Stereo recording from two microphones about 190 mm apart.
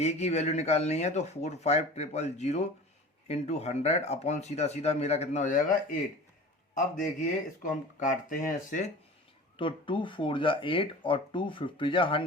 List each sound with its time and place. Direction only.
0.0 s speech: 35° left (ahead or behind)
7.0 s speech: 45° left (ahead or behind)
9.6 s speech: 25° left (ahead or behind)